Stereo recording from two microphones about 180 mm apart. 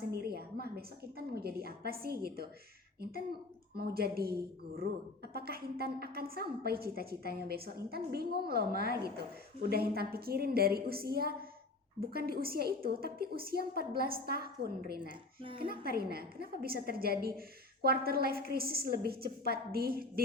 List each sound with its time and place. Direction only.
0.1 s a woman's voice: 60° right (ahead or behind)
15.4 s speech: 30° right (ahead or behind)
15.6 s a woman's voice: 55° right (ahead or behind)